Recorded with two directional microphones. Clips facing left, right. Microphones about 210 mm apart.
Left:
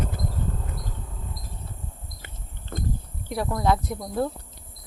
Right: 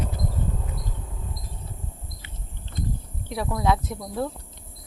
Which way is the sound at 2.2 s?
50° left (ahead or behind).